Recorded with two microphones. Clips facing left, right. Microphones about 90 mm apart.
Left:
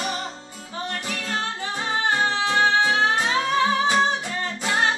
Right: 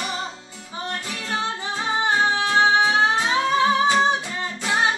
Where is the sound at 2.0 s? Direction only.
20° right (ahead or behind).